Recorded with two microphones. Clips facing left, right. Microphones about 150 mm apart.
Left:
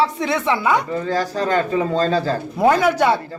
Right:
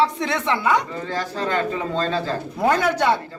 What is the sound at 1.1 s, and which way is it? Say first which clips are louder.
Speech: left 4 dB; 40° left (ahead or behind).